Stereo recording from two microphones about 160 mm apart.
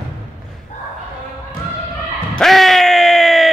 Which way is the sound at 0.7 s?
45° left (ahead or behind).